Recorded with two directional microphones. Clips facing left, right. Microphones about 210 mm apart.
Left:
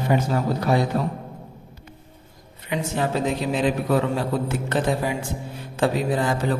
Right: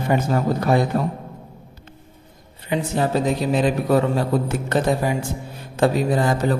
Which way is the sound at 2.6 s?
35° right (ahead or behind).